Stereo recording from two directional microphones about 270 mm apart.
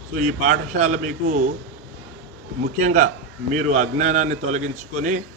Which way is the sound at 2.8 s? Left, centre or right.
Right.